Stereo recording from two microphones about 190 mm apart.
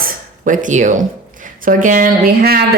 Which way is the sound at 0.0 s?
45° right (ahead or behind).